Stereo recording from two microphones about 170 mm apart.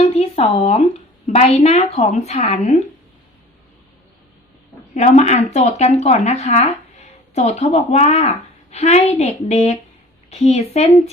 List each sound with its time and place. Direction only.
0.0 s a sound: 40° left (ahead or behind)
1.3 s speech: 35° left (ahead or behind)
4.9 s speech: 40° left (ahead or behind)